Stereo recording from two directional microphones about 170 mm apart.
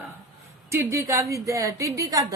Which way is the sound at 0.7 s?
15° right (ahead or behind).